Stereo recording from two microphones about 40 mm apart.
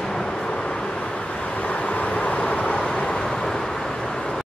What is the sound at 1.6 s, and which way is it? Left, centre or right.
Vehicle, left.